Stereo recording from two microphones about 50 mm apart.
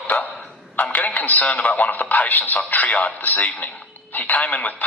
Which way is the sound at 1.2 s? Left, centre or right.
Left.